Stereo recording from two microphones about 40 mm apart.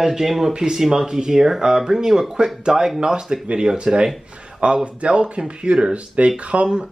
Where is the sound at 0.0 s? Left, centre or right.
Centre.